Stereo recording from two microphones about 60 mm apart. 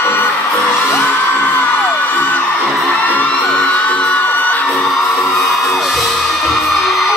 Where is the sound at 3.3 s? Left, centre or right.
Centre.